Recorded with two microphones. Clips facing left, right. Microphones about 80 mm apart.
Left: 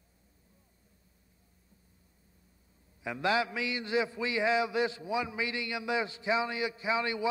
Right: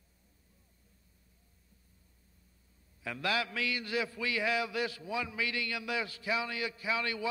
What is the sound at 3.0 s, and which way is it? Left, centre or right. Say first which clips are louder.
A man's voice: left 4 dB; left.